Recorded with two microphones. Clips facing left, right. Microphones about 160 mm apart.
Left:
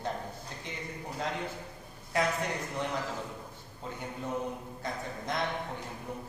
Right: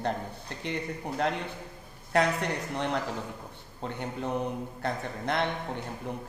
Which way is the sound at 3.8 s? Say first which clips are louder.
Right 5 dB; 65° right (ahead or behind).